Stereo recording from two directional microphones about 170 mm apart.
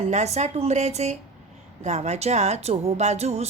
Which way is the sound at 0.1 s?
40° right (ahead or behind).